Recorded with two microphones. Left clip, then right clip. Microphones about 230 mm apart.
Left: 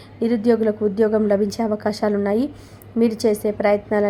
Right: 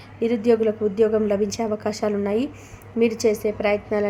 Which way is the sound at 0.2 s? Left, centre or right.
Centre.